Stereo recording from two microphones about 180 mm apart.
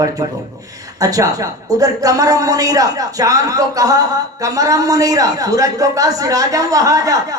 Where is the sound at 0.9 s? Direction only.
20° right (ahead or behind).